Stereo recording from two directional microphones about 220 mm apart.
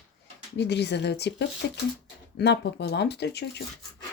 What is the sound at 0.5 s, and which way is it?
Speech, 50° left (ahead or behind).